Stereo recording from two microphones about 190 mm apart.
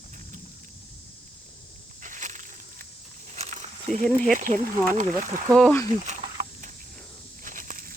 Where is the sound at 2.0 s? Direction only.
40° right (ahead or behind).